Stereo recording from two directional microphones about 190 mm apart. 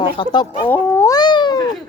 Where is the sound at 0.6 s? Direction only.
10° left (ahead or behind).